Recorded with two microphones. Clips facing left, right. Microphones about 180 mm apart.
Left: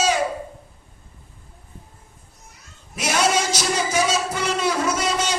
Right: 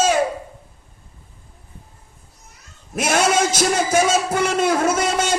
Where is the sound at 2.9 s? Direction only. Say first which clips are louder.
Right 3 dB; 50° right (ahead or behind).